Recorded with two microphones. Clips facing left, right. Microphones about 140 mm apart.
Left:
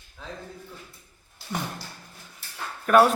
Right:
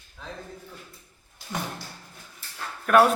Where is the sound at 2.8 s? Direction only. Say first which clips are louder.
Left 1 dB; centre (ahead or behind).